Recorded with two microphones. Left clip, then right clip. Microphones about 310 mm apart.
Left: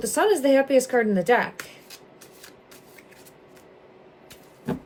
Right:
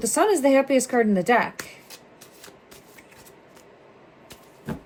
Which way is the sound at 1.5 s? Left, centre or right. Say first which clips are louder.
Right 1 dB; centre.